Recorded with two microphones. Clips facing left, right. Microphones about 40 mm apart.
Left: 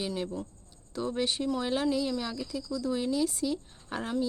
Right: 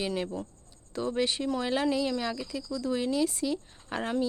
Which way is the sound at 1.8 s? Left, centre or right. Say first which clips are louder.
Right 1 dB; right.